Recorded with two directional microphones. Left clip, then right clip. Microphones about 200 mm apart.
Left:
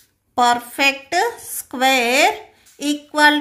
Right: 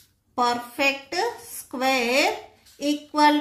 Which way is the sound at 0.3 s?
55° left (ahead or behind).